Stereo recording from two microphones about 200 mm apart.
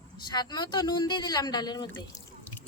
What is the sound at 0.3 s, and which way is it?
Speech, 20° left (ahead or behind).